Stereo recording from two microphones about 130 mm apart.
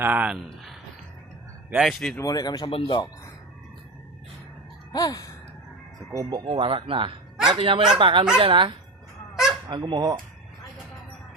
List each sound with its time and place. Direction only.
0.0 s speech: 10° right (ahead or behind)
1.8 s speech: centre (ahead or behind)
2.1 s speech: 25° left (ahead or behind)
2.6 s speech: 40° left (ahead or behind)
4.9 s speech: 30° left (ahead or behind)
6.3 s speech: 45° right (ahead or behind)
7.9 s honk: 40° right (ahead or behind)
9.3 s honk: 5° right (ahead or behind)
9.6 s honk: 35° right (ahead or behind)